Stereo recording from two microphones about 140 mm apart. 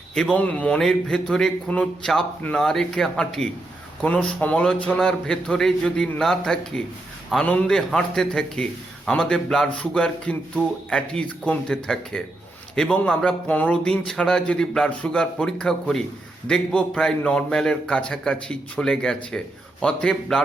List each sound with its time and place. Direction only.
0.1 s a man's voice: 5° left (ahead or behind)